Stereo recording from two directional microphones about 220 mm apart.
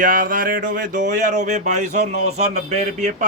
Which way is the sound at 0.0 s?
40° right (ahead or behind).